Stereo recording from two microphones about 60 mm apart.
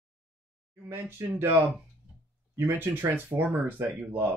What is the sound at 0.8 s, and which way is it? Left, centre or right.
Speech, right.